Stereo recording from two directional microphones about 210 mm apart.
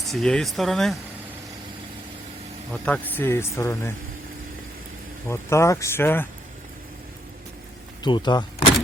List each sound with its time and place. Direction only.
0.0 s speech: centre (ahead or behind)
2.8 s speech: 5° left (ahead or behind)
5.3 s speech: 15° left (ahead or behind)
8.0 s speech: 20° left (ahead or behind)